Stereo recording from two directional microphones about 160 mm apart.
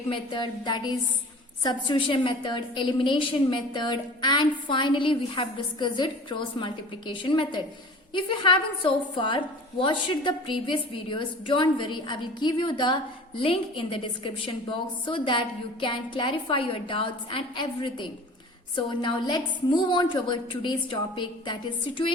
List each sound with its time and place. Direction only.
0.1 s a woman's voice: 30° left (ahead or behind)